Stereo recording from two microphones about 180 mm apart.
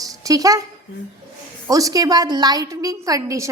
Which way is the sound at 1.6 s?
20° right (ahead or behind).